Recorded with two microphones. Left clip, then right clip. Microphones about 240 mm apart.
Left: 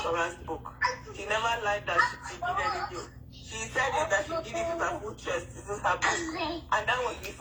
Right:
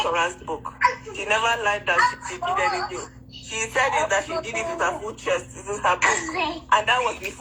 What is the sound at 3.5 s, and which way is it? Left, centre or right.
Speech, right.